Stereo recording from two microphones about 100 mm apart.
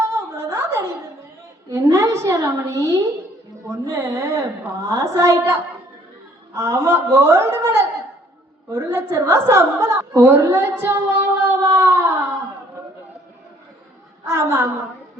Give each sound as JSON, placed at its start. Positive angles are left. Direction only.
{"t": 0.1, "sound": "a sound", "side_deg": -25}
{"t": 1.7, "sound": "a woman's voice", "side_deg": -30}
{"t": 14.3, "sound": "a woman's voice", "side_deg": -25}